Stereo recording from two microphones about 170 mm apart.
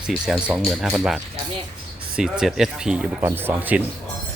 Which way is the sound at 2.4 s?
5° right (ahead or behind).